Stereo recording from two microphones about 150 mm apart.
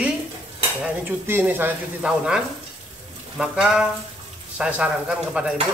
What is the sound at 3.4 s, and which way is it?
Speech, 5° right (ahead or behind).